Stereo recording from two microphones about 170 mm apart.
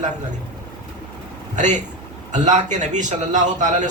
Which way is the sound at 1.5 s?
45° right (ahead or behind).